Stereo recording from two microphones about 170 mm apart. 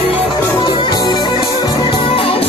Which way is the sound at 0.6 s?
25° left (ahead or behind).